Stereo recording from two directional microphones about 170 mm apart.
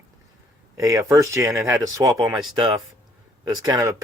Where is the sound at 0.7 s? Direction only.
20° right (ahead or behind).